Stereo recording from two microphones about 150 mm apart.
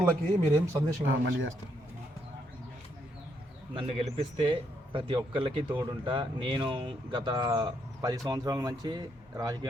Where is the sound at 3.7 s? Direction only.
40° right (ahead or behind).